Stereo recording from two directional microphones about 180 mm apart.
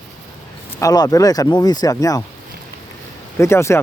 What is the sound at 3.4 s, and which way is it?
Speech, 15° left (ahead or behind).